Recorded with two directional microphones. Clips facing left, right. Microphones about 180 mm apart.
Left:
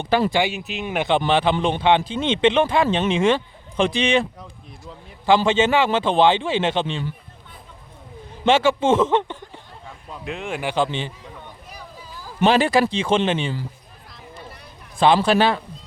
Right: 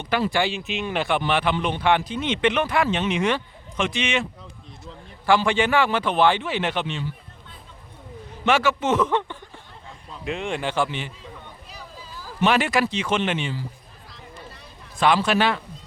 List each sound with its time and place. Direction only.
0.3 s speech: 15° left (ahead or behind); by 4.3 s 35° left (ahead or behind)
5.5 s speech: 20° left (ahead or behind)
8.4 s speech: 25° left (ahead or behind)
10.2 s speech: centre (ahead or behind)
10.8 s speech: 30° left (ahead or behind)
12.5 s a man's voice: 30° left (ahead or behind)
14.9 s a man's voice: 30° left (ahead or behind)